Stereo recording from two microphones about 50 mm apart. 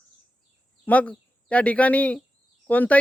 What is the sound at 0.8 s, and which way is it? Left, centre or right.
Speech, left.